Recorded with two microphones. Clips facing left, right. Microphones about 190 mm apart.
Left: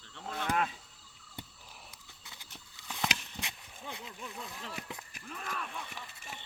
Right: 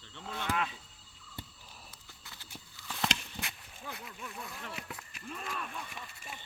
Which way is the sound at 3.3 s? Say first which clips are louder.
Even; 20° left (ahead or behind).